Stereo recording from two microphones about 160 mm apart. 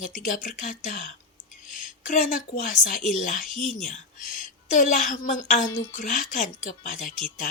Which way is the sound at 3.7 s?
55° left (ahead or behind).